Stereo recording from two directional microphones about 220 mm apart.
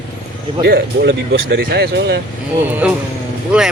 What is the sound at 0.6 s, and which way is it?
Speech, 50° right (ahead or behind).